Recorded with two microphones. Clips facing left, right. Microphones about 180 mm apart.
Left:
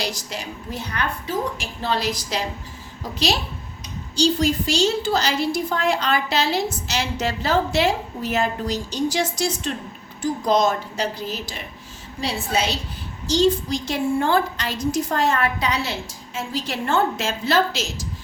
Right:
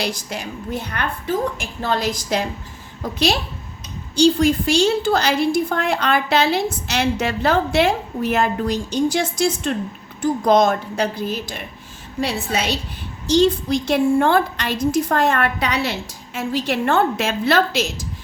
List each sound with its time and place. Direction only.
0.0 s a woman's voice: 55° right (ahead or behind)
12.2 s a woman's voice: 65° right (ahead or behind)